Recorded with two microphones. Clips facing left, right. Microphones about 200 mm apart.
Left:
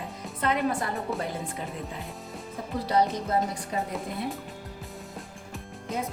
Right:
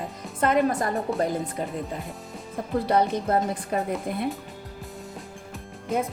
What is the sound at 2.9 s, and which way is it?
A woman's voice, 55° right (ahead or behind).